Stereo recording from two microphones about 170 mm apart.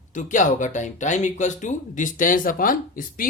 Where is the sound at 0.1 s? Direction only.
50° left (ahead or behind).